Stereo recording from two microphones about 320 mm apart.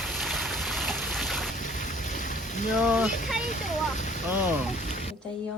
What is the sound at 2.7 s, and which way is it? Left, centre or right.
Speech, centre.